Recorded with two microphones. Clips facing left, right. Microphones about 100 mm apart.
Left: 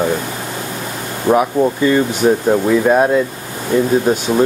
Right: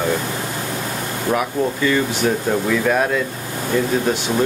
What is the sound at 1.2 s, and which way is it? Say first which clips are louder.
Speech: left 7 dB; 25° left (ahead or behind).